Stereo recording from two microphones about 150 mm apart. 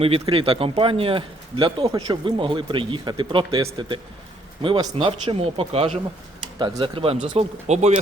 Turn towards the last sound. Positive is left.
turn(degrees=-45)  # may be behind; listen again after turning